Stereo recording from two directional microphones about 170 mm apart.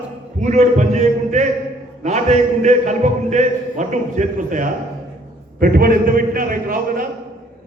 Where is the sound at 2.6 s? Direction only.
45° right (ahead or behind).